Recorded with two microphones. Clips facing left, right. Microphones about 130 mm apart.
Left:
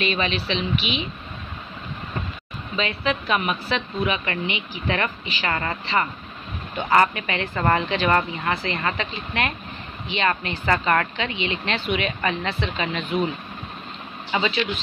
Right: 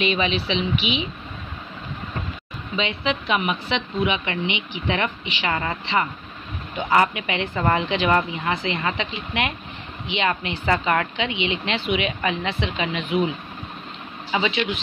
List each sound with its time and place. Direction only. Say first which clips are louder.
0.0 s a woman's voice: right 2 dB; 15° right (ahead or behind)
2.7 s a woman's voice: even; 20° right (ahead or behind)
14.3 s a woman's voice: right 1 dB; 10° right (ahead or behind)